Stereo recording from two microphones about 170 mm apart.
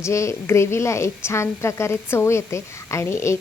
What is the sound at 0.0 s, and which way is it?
A woman's voice, 15° left (ahead or behind).